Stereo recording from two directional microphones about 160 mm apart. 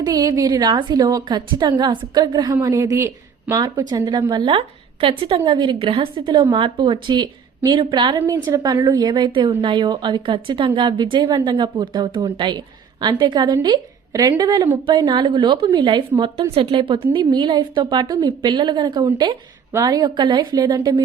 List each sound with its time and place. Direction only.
0.0 s speech: 25° right (ahead or behind)